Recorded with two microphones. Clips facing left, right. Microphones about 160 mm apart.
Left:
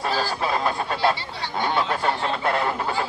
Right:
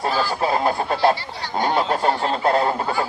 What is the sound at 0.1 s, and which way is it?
Speech, 40° left (ahead or behind).